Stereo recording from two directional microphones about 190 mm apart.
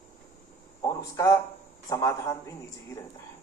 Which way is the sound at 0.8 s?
15° left (ahead or behind).